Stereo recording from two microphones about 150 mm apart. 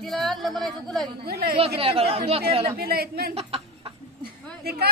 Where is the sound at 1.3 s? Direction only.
90° right.